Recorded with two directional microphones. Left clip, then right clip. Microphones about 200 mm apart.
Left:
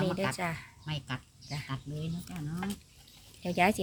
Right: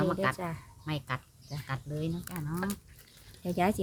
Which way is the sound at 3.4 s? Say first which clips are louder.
Left 2 dB; 15° right (ahead or behind).